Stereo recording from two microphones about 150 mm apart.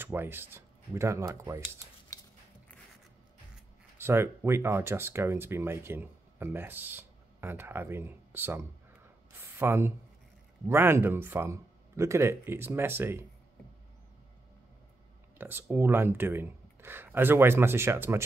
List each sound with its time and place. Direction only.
0.0 s speech: 15° right (ahead or behind)
4.0 s speech: 15° right (ahead or behind)
15.3 s speech: 15° right (ahead or behind)